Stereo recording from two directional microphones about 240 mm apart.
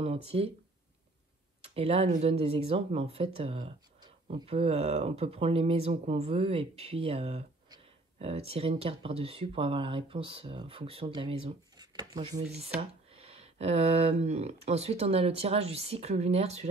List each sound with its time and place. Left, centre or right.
0.0 s speech: right
1.6 s speech: right